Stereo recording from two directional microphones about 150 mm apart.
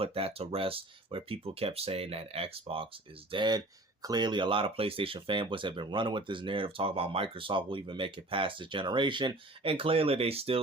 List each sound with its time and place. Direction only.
0.0 s speech: 40° right (ahead or behind)